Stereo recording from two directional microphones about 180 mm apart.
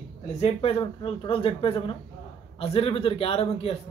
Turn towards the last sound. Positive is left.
turn(degrees=35)  # may be behind; listen again after turning